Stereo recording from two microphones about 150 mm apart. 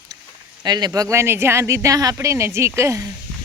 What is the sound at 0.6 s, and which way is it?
Speech, 25° right (ahead or behind).